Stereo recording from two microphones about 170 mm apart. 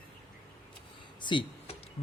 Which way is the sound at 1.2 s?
30° left (ahead or behind).